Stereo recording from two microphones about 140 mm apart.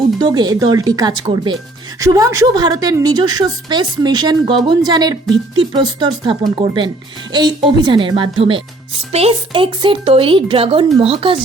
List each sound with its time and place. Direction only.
0.2 s a woman's voice: 30° right (ahead or behind)